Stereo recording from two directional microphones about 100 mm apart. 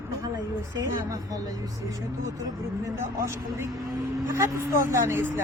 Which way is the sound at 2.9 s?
25° right (ahead or behind).